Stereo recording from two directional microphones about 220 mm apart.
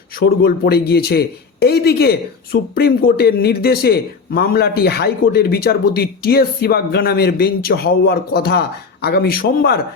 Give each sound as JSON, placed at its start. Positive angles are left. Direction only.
{"t": 0.2, "sound": "speech", "side_deg": 45}